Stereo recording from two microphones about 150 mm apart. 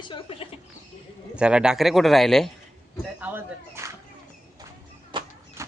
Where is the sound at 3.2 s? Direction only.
15° right (ahead or behind).